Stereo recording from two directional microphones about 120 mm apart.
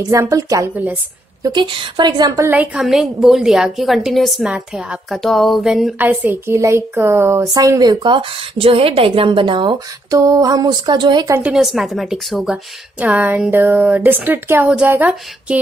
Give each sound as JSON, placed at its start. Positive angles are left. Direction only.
{"t": 0.1, "sound": "a woman's voice", "side_deg": -25}
{"t": 1.4, "sound": "a sound", "side_deg": -40}
{"t": 2.4, "sound": "a woman's voice", "side_deg": -15}
{"t": 2.8, "sound": "a woman's voice", "side_deg": -5}
{"t": 5.9, "sound": "a woman's voice", "side_deg": -15}
{"t": 10.1, "sound": "a sound", "side_deg": -30}
{"t": 11.4, "sound": "a woman's voice", "side_deg": -5}
{"t": 13.0, "sound": "a woman's voice", "side_deg": -15}